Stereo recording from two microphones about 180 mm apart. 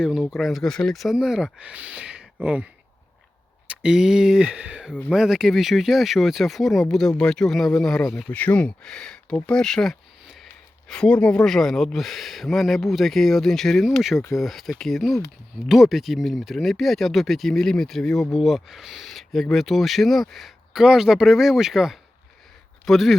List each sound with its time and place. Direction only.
0.0 s speech: centre (ahead or behind)
3.7 s speech: 5° right (ahead or behind)